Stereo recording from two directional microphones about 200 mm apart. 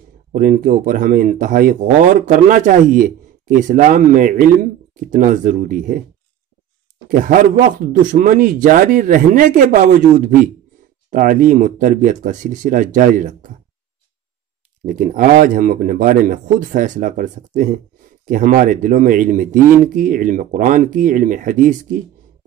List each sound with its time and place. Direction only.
0.3 s speech: 40° right (ahead or behind)
7.1 s speech: 45° right (ahead or behind)
14.9 s speech: 40° right (ahead or behind)